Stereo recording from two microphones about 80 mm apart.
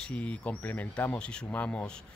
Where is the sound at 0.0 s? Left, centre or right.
Centre.